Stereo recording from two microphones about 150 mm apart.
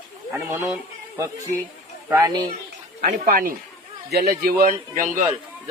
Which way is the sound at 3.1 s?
70° right (ahead or behind).